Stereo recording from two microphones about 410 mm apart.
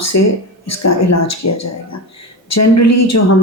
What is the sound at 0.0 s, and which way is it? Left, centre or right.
Speech, left.